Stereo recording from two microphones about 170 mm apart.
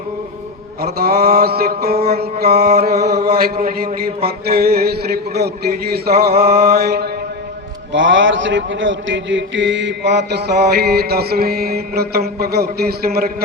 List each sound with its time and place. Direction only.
0.8 s a man's voice: 65° right (ahead or behind)
7.9 s a man's voice: 90° right; by 13.3 s 65° right (ahead or behind)